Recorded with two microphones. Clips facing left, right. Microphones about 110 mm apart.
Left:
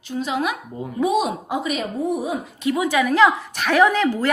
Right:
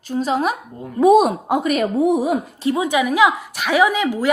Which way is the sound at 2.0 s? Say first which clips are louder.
Right 6 dB; 90° right.